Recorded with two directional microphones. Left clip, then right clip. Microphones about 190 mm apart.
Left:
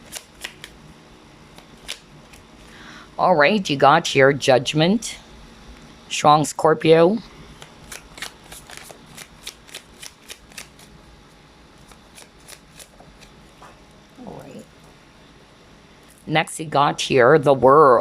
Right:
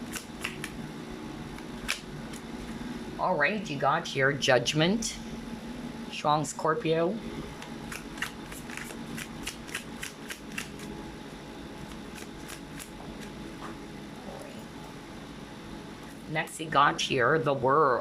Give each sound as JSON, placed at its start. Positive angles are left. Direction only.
{"t": 3.2, "sound": "speech", "side_deg": 40}
{"t": 6.1, "sound": "speech", "side_deg": 30}
{"t": 16.6, "sound": "speech", "side_deg": 25}